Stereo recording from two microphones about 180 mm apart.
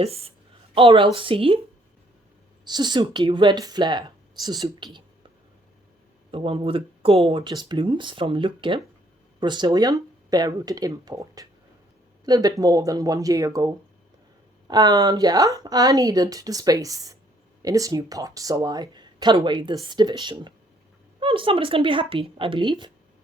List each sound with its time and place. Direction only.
0.0 s a woman's voice: 35° right (ahead or behind)
2.6 s speech: 25° right (ahead or behind)
6.3 s speech: 30° right (ahead or behind)
14.7 s speech: 25° right (ahead or behind)